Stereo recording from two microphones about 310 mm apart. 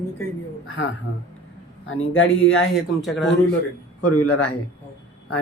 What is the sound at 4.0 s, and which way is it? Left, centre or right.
Speech, left.